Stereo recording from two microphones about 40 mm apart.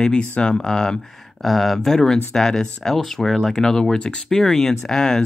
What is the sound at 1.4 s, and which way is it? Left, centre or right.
Speech, centre.